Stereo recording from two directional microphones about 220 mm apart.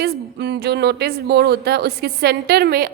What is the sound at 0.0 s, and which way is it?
A woman's voice, 50° right (ahead or behind).